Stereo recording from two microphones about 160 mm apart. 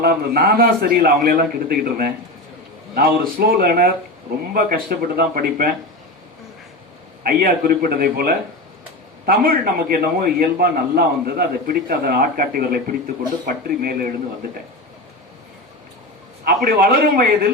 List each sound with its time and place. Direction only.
0.0 s a man's voice: 70° right (ahead or behind)
7.3 s a man's voice: 65° right (ahead or behind)
16.4 s a man's voice: 70° right (ahead or behind)